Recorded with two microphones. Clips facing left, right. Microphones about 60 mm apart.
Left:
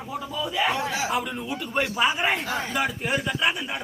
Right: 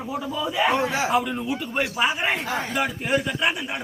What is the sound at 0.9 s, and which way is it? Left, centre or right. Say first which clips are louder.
Speech: right 3 dB; right.